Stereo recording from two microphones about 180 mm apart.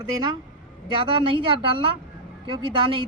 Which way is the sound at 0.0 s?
25° right (ahead or behind).